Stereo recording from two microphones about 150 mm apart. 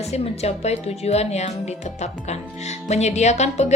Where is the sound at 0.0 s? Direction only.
45° left (ahead or behind).